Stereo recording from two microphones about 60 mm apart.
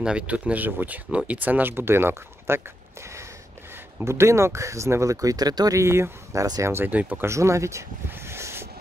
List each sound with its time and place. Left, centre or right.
0.0 s speech: right
5.8 s speech: right
6.9 s speech: right
7.2 s speech: right
8.1 s a sound: right